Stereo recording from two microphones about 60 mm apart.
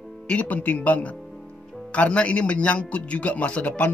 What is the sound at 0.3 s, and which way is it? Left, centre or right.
Speech, left.